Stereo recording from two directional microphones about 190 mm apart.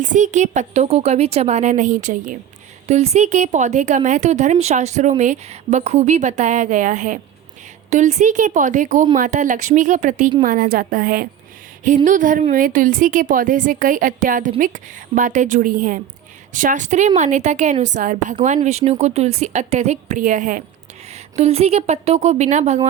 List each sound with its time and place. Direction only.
0.0 s a woman's voice: 40° right (ahead or behind)
21.1 s speech: 35° right (ahead or behind)